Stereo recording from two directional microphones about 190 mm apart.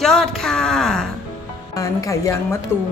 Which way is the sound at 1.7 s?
15° left (ahead or behind).